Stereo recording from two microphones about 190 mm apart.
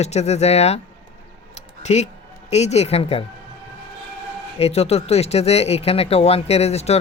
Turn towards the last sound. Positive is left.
turn(degrees=35)  # may be behind; listen again after turning